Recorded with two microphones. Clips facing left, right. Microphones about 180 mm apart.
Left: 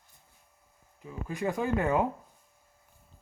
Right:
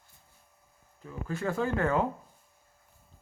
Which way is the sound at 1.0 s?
15° left (ahead or behind).